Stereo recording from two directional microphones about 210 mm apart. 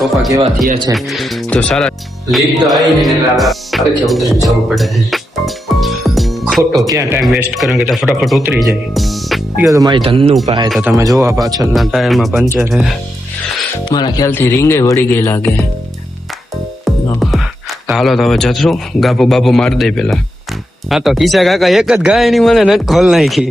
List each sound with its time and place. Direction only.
0.7 s speech: 20° right (ahead or behind)
0.9 s speech: centre (ahead or behind)
4.4 s music: centre (ahead or behind)
6.8 s speech: 15° right (ahead or behind)
7.2 s speech: centre (ahead or behind)
9.7 s speech: 20° right (ahead or behind)
10.7 s speech: 5° right (ahead or behind)
10.9 s speech: 15° right (ahead or behind)
11.7 s speech: centre (ahead or behind)
13.9 s speech: 20° left (ahead or behind)
16.8 s music: centre (ahead or behind)
17.9 s speech: centre (ahead or behind)